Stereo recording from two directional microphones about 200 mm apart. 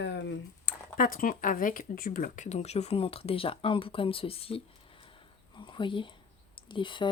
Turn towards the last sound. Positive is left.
turn(degrees=25)  # may be behind; listen again after turning